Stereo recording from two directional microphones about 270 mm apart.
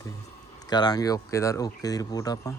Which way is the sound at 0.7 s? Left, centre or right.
Centre.